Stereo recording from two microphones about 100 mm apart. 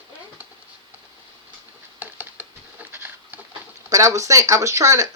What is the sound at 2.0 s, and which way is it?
Patter, 20° right (ahead or behind).